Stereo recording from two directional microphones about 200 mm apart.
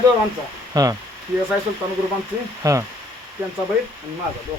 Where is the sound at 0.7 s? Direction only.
15° right (ahead or behind).